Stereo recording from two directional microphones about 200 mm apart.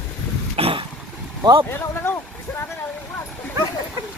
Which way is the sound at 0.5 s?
25° right (ahead or behind).